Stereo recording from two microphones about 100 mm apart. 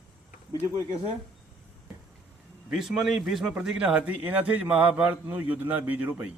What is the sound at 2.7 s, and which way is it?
A man's voice, 5° right (ahead or behind).